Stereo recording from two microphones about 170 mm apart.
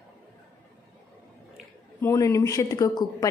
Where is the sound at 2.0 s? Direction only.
20° left (ahead or behind).